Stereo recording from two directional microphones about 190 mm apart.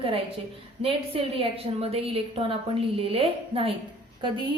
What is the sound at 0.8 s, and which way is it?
A woman's voice, 30° right (ahead or behind).